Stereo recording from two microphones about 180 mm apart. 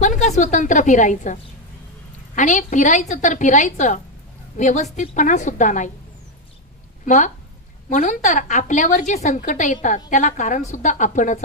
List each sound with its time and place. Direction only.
0.0 s a woman's voice: 40° left (ahead or behind)
7.1 s a woman's voice: 45° left (ahead or behind)